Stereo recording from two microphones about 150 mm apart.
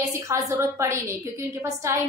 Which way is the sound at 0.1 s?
20° right (ahead or behind).